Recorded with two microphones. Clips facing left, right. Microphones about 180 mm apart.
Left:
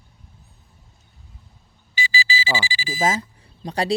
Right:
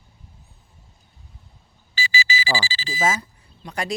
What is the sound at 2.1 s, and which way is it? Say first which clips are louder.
Alarm clock: even; 35° left (ahead or behind).